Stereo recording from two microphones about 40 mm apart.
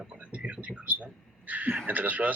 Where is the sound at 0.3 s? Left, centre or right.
Right.